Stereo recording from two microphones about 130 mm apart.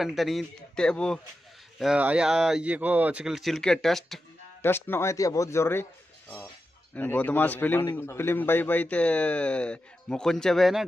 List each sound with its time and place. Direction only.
0.0 s speech: centre (ahead or behind)
1.8 s speech: 10° right (ahead or behind)
4.6 s speech: 15° left (ahead or behind)
7.0 s a man's voice: 10° left (ahead or behind)